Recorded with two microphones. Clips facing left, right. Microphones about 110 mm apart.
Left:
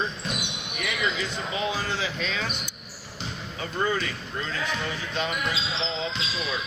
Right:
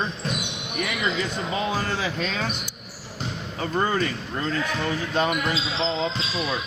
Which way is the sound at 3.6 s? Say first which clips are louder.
Right 4 dB; 45° right (ahead or behind).